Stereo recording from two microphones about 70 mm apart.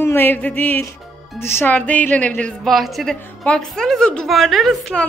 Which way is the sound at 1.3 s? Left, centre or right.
Left.